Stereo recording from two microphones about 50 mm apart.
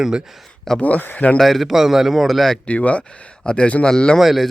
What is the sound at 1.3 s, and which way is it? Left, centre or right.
A man's voice, centre.